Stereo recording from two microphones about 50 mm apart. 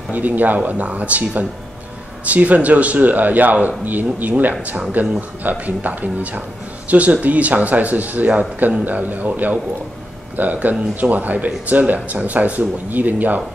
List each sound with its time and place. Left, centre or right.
0.1 s speech: right
10.3 s speech: right